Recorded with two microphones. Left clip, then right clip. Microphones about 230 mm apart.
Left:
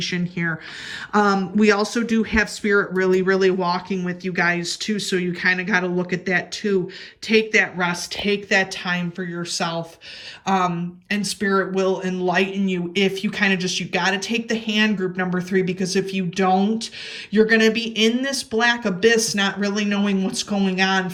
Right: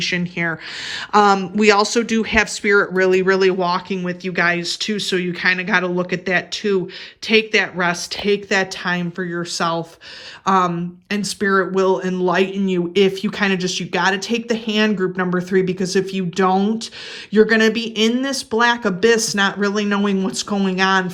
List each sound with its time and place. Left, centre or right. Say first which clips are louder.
0.0 s speech: right 4 dB; centre